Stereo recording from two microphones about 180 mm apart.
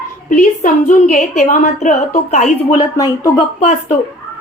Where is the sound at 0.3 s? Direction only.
45° left (ahead or behind).